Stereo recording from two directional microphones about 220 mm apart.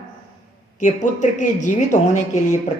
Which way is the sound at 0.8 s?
35° left (ahead or behind).